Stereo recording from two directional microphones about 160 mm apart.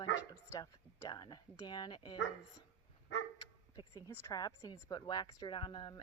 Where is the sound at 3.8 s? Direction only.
25° left (ahead or behind).